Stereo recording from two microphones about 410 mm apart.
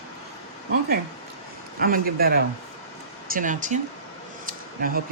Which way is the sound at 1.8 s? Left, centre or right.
Right.